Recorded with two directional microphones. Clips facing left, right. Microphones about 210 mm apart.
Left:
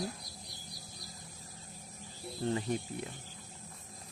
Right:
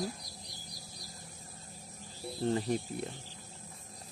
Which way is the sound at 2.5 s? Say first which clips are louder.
Right 2 dB; 35° right (ahead or behind).